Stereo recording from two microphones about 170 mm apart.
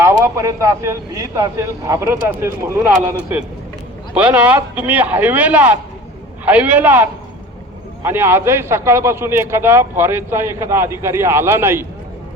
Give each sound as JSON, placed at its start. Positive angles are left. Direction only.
{"t": 0.0, "sound": "a man's voice", "side_deg": -20}